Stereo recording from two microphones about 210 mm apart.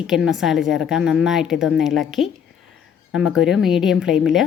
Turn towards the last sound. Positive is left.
turn(degrees=0)  # may be behind; listen again after turning